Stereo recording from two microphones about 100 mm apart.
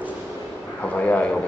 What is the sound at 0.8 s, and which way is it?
Speech, 15° left (ahead or behind).